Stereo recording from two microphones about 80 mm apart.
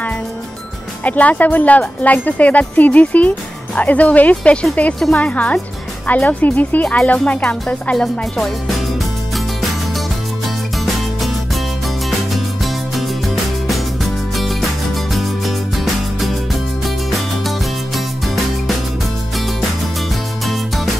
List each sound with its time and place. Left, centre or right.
1.0 s speech: centre
9.3 s music: centre
20.4 s music: centre